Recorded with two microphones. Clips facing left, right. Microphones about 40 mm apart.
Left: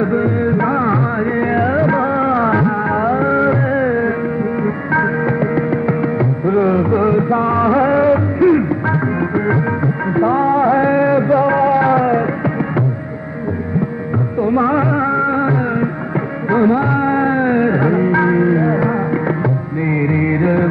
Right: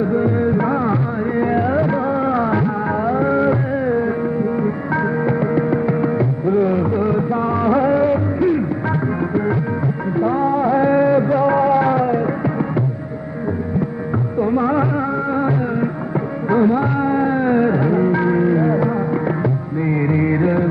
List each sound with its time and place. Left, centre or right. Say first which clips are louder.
0.0 s music: left 1 dB; left
1.5 s music of bollywood: left 4 dB; left
3.3 s music: left 3 dB; left
6.4 s music of bollywood: left 3 dB; left
10.1 s music: left 4 dB; left
14.4 s music: left 3 dB; left
19.9 s music: left 1 dB; left